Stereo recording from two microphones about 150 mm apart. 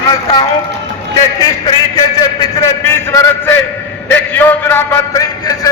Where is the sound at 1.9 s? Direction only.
25° left (ahead or behind).